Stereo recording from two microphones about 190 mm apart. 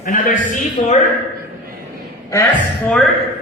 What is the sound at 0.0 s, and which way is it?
Speech, 45° left (ahead or behind).